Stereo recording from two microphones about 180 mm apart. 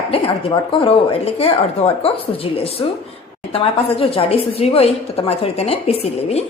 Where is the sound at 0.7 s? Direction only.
30° left (ahead or behind).